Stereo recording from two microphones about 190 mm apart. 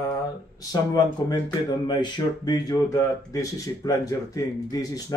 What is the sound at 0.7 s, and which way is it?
Speech, 20° left (ahead or behind).